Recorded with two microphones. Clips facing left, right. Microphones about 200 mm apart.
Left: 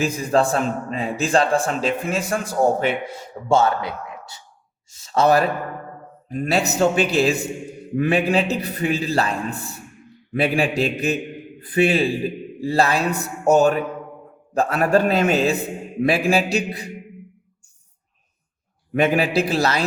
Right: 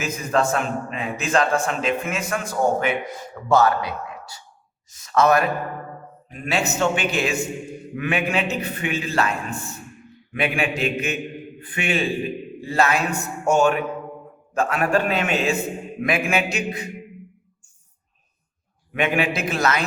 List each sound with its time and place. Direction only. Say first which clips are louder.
0.0 s a man's voice: left 3 dB; 35° left (ahead or behind)
18.9 s a man's voice: left 4 dB; 40° left (ahead or behind)